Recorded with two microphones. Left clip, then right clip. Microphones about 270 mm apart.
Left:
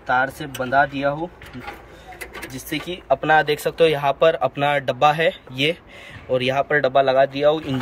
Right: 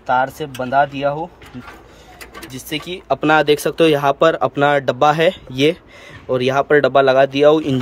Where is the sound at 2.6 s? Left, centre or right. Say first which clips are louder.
Right 1 dB; right.